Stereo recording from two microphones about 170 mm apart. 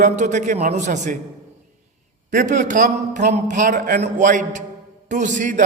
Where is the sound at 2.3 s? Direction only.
50° right (ahead or behind).